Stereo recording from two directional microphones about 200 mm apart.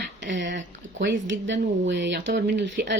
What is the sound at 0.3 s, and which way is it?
Speech, 65° right (ahead or behind).